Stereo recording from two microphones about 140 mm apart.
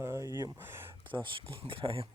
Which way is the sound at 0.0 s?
20° right (ahead or behind).